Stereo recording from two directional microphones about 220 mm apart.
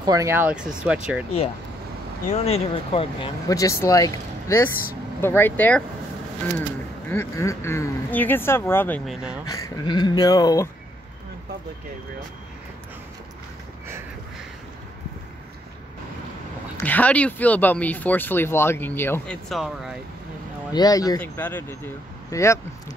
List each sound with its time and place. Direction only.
0.0 s speech: 15° right (ahead or behind)
2.3 s speech: 30° left (ahead or behind); by 5.9 s 5° left (ahead or behind)
7.1 s speech: 10° left (ahead or behind)
9.5 s speech: 20° left (ahead or behind)
16.7 s speech: 5° left (ahead or behind)
20.7 s speech: 15° left (ahead or behind)